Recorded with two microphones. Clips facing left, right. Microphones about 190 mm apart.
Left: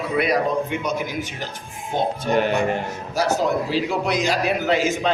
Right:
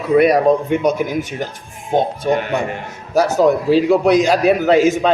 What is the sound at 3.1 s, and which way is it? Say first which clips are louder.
A man's voice: right 7 dB; 45° right (ahead or behind).